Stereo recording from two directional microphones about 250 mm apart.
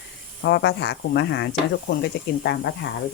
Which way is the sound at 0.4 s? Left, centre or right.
Left.